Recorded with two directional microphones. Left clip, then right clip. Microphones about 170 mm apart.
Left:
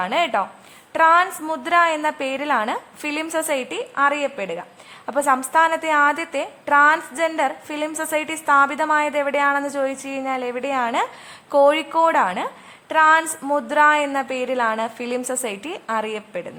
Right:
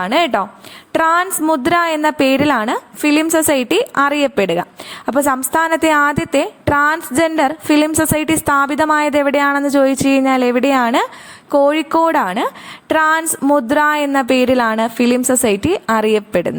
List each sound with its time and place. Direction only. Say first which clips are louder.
0.0 s a woman's voice: right 5 dB; 40° right (ahead or behind)
5.0 s a woman's voice: right 4 dB; 35° right (ahead or behind)
11.5 s a woman's voice: right 3 dB; 30° right (ahead or behind); by 16.6 s 50° right (ahead or behind)